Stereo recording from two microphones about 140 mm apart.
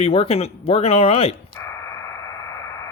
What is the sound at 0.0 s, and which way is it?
Speech, 45° left (ahead or behind).